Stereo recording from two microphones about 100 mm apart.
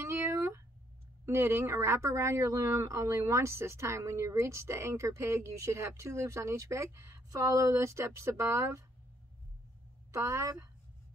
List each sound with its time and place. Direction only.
0.0 s a sound: 25° right (ahead or behind)
1.2 s speech: 25° right (ahead or behind)
10.1 s speech: 30° right (ahead or behind)